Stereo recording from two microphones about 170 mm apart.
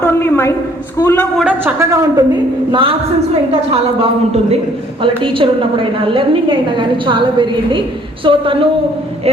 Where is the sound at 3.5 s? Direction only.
35° right (ahead or behind).